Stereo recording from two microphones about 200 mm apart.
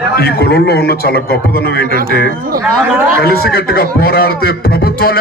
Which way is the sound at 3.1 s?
50° left (ahead or behind).